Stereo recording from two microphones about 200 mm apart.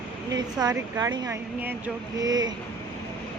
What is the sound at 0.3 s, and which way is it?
Speech, 20° right (ahead or behind).